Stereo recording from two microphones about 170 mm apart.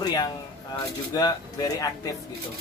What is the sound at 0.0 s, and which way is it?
Speech, 20° left (ahead or behind).